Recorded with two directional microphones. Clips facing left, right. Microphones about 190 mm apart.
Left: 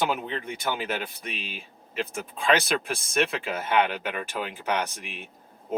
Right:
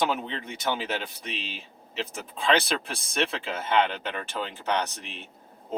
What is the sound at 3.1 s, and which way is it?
Speech, 10° left (ahead or behind).